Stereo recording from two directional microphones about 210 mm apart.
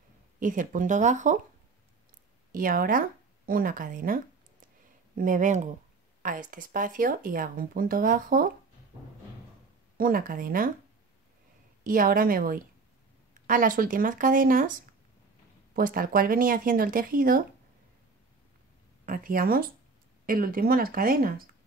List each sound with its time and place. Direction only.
0.4 s speech: 40° right (ahead or behind)
2.5 s speech: 40° right (ahead or behind)
9.9 s speech: 40° right (ahead or behind)
11.8 s speech: 40° right (ahead or behind)
19.0 s speech: 40° right (ahead or behind)